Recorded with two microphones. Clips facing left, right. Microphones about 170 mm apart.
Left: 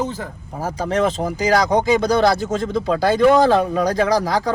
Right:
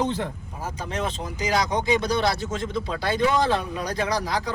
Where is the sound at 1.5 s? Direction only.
60° left (ahead or behind).